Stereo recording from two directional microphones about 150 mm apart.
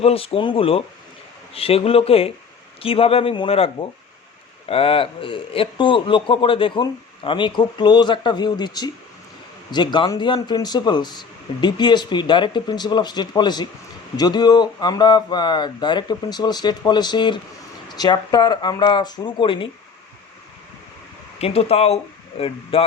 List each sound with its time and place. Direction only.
0.0 s speech: 40° left (ahead or behind)
21.4 s speech: 45° left (ahead or behind)